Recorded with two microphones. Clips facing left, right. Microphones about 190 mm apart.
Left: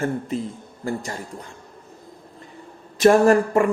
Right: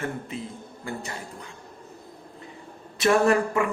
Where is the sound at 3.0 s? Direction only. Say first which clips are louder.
Left 6 dB; 45° left (ahead or behind).